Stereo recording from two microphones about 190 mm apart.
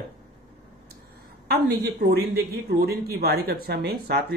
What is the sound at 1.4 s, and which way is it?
A woman's voice, 60° right (ahead or behind).